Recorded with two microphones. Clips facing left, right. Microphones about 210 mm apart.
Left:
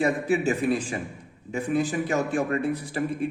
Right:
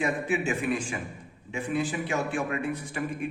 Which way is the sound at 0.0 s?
40° left (ahead or behind).